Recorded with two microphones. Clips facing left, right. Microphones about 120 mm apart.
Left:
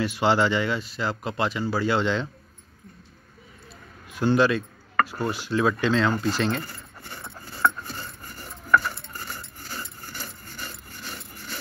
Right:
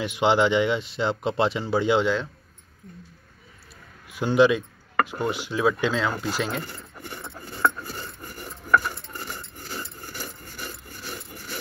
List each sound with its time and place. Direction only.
0.0 s speech: 15° right (ahead or behind)
4.1 s speech: 15° right (ahead or behind)
6.7 s keys jangling: 15° right (ahead or behind)
7.6 s cutlery: 10° right (ahead or behind)
10.0 s rub: 10° right (ahead or behind)